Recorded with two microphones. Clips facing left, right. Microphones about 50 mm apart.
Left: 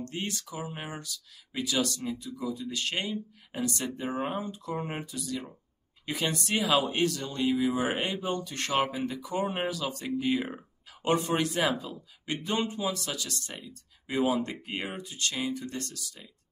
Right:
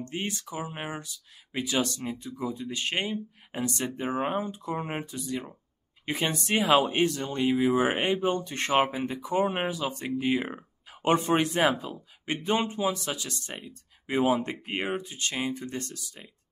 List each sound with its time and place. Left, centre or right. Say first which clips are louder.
0.0 s speech: right 2 dB; right
4.4 s speech: right 2 dB; right